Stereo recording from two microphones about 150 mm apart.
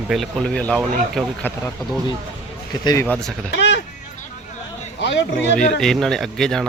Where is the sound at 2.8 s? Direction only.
25° left (ahead or behind).